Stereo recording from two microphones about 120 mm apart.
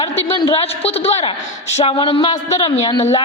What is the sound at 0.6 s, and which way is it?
Speech, 55° left (ahead or behind).